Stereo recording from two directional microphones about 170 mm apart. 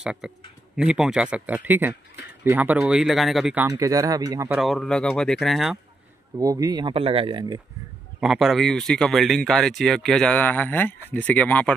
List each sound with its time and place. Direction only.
0.0 s a man's voice: 5° right (ahead or behind)
3.7 s speech: 20° right (ahead or behind)
4.6 s speech: centre (ahead or behind)
6.3 s speech: 20° right (ahead or behind)
8.2 s speech: centre (ahead or behind)